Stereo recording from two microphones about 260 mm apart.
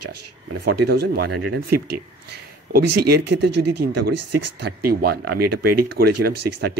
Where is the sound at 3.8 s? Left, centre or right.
Right.